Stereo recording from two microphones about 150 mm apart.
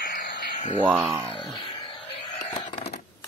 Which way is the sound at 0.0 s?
90° left.